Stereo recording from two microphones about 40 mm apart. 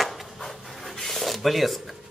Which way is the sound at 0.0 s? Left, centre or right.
Centre.